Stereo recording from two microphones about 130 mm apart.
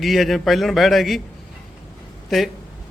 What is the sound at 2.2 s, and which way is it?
Speech, centre (ahead or behind).